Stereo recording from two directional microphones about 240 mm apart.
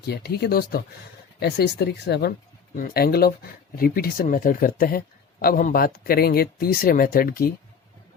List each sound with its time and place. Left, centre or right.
0.1 s speech: left